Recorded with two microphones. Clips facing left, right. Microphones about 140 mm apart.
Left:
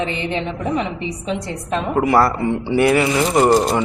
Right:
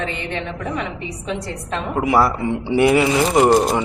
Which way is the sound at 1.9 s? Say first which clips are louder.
Left 1 dB; 5° right (ahead or behind).